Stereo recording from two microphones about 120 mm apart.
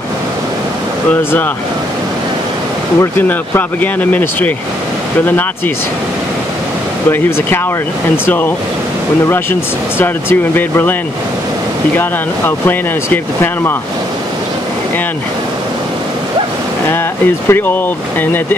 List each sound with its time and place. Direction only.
3.0 s speech: 15° left (ahead or behind)
7.1 s speech: 20° left (ahead or behind)
12.0 s speech: 15° left (ahead or behind)
17.5 s speech: 15° left (ahead or behind)